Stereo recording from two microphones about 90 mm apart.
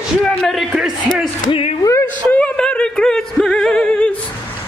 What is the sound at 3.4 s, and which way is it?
Music, 5° left (ahead or behind).